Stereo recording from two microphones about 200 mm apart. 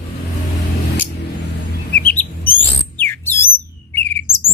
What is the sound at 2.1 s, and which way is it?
Bird, 10° left (ahead or behind).